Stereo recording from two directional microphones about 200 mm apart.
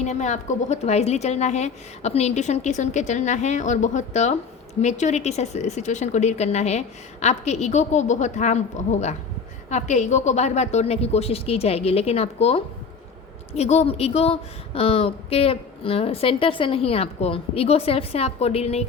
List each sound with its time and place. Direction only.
0.0 s a woman's voice: 35° left (ahead or behind)